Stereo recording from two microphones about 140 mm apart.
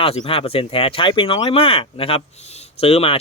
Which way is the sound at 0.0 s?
45° left (ahead or behind).